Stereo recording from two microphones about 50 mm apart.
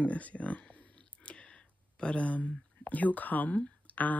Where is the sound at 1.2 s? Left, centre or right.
Left.